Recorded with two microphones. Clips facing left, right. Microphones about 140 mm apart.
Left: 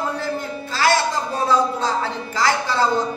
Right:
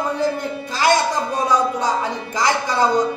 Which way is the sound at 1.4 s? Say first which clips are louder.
Even; 15° right (ahead or behind).